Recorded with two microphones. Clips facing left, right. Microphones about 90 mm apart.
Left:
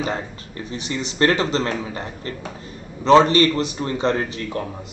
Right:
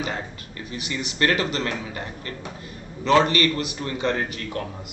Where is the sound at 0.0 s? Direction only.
30° left (ahead or behind).